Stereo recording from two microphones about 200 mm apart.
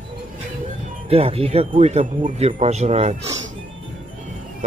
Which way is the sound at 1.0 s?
30° right (ahead or behind).